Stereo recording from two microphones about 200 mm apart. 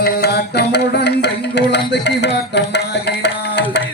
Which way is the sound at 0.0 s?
55° left (ahead or behind).